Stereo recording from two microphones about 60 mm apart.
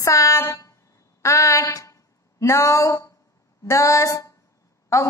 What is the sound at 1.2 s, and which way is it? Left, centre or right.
Speech, left.